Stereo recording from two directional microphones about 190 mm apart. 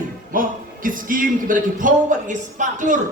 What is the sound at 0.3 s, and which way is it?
A man's voice, 45° right (ahead or behind).